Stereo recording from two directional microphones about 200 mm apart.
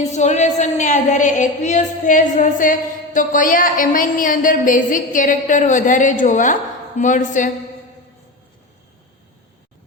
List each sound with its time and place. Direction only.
0.0 s a woman's voice: 35° left (ahead or behind)